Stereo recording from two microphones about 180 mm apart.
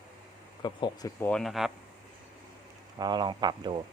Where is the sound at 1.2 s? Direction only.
5° left (ahead or behind).